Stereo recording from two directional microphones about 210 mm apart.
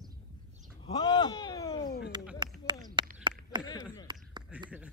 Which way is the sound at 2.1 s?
20° right (ahead or behind).